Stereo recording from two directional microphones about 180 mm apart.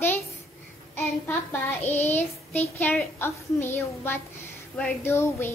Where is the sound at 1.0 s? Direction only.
10° left (ahead or behind).